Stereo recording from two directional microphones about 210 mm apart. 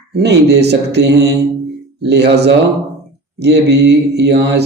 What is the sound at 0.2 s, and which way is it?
Mantra, 50° right (ahead or behind).